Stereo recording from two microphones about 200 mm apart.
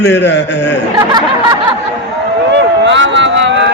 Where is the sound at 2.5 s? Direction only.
65° right (ahead or behind).